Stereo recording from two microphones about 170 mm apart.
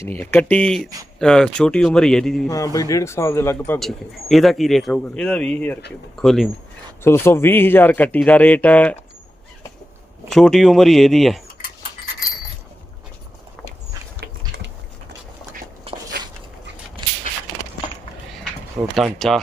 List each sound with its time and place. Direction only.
0.0 s a man's voice: 10° left (ahead or behind)
2.5 s speech: 20° left (ahead or behind)
3.8 s a man's voice: centre (ahead or behind)
7.0 s speech: 15° left (ahead or behind)
10.3 s a man's voice: centre (ahead or behind)
14.2 s a sound: 75° right (ahead or behind)
18.9 s a man's voice: centre (ahead or behind)